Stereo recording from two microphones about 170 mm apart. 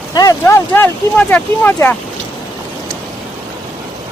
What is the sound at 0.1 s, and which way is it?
Speech, 20° left (ahead or behind).